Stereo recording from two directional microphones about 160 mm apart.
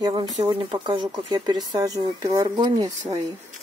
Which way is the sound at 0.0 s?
30° right (ahead or behind).